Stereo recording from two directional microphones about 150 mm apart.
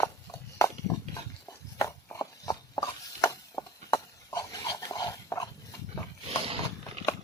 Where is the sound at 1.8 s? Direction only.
20° left (ahead or behind).